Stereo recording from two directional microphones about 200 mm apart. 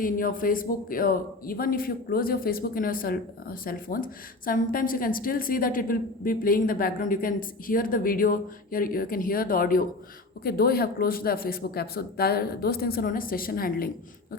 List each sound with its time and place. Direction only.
0.0 s speech: 45° left (ahead or behind)